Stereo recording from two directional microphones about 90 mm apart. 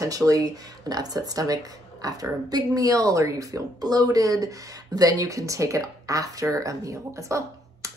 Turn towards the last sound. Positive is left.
turn(degrees=-35)  # may be behind; listen again after turning